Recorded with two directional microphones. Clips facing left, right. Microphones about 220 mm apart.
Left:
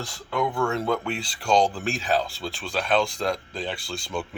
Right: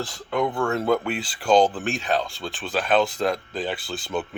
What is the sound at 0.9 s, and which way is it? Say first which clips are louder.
Speech: right 4 dB; 5° right (ahead or behind).